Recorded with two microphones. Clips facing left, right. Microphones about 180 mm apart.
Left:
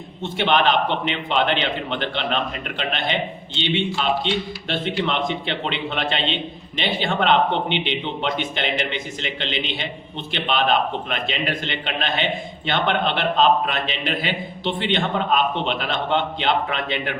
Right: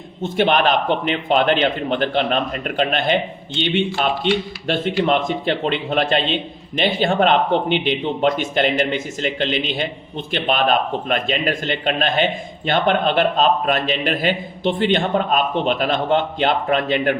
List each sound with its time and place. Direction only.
0.2 s a man's voice: 45° right (ahead or behind)